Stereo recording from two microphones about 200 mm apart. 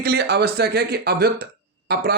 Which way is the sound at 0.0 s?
55° right (ahead or behind).